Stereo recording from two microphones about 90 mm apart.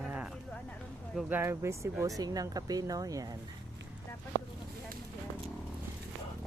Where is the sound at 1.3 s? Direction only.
25° right (ahead or behind); by 3.3 s 45° right (ahead or behind).